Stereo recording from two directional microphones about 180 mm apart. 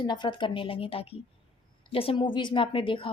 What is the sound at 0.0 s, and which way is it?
Speech, 25° left (ahead or behind).